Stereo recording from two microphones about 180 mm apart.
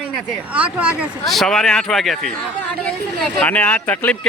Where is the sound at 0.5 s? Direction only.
5° right (ahead or behind).